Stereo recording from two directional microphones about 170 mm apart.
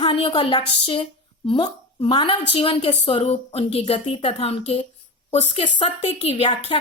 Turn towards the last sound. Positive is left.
turn(degrees=35)  # may be behind; listen again after turning